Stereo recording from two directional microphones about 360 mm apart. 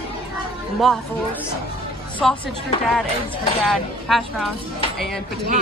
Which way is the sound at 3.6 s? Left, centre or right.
Centre.